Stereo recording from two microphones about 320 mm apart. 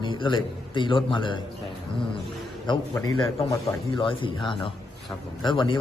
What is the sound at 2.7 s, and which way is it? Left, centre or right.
A man's voice, centre.